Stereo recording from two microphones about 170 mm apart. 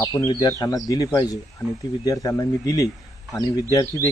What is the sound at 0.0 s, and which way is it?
Speech, 20° left (ahead or behind).